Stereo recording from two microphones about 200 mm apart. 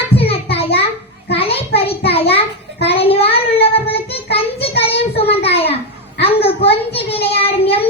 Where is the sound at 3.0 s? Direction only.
30° left (ahead or behind).